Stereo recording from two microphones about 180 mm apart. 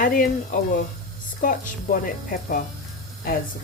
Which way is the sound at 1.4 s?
50° left (ahead or behind).